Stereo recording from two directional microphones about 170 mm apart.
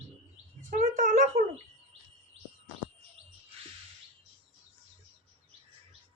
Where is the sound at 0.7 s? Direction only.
55° right (ahead or behind).